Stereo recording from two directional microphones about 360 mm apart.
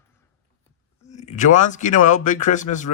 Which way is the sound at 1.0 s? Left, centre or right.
Centre.